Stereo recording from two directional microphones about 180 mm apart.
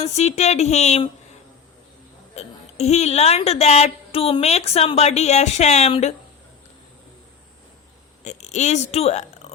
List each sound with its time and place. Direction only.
0.0 s speech: 40° left (ahead or behind)
2.3 s speech: 35° left (ahead or behind)
8.2 s speech: 40° left (ahead or behind)